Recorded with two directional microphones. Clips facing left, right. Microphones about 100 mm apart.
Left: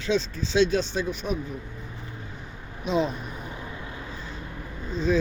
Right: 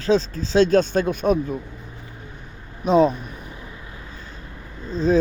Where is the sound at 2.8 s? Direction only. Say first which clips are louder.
Right 9 dB; 45° right (ahead or behind).